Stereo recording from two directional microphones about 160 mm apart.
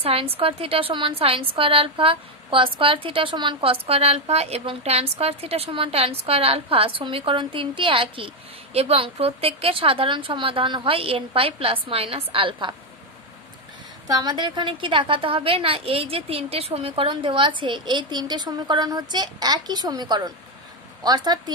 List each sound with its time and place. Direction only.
0.0 s a woman's voice: 35° right (ahead or behind)
14.0 s a woman's voice: 25° right (ahead or behind)